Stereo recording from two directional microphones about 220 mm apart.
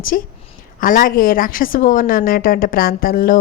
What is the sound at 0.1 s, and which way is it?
A woman's voice, 40° left (ahead or behind).